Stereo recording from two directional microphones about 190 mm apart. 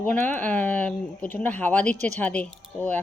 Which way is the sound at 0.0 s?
10° left (ahead or behind).